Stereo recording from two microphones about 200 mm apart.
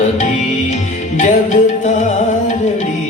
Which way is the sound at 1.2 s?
40° left (ahead or behind).